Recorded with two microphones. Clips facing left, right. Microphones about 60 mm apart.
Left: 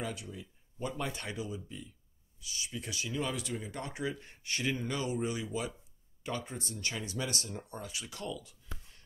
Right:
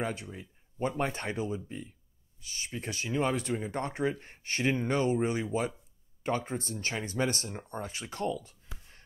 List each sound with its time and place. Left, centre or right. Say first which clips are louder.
0.0 s speech: right 5 dB; right